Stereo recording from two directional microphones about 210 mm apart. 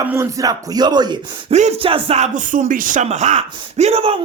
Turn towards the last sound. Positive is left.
turn(degrees=-25)  # may be behind; listen again after turning